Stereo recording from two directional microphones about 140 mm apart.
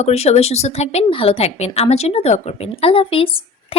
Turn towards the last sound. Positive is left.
turn(degrees=40)  # may be behind; listen again after turning